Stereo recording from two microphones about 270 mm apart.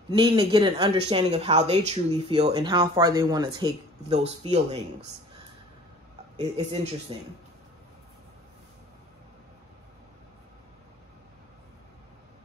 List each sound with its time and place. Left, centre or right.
0.1 s speech: centre
6.3 s speech: right